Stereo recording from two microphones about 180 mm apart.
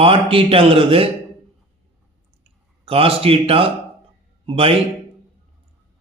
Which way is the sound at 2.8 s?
30° right (ahead or behind).